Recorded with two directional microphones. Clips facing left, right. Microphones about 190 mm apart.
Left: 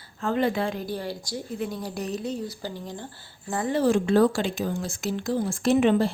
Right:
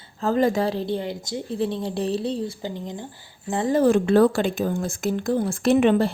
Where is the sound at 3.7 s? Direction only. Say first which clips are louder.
Right 4 dB; 55° right (ahead or behind).